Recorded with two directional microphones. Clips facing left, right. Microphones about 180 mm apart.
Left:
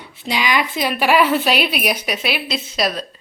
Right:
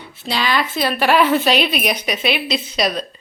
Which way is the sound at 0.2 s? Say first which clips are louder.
Even; 15° left (ahead or behind).